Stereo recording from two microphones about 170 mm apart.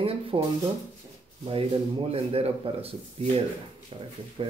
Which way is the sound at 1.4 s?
35° right (ahead or behind).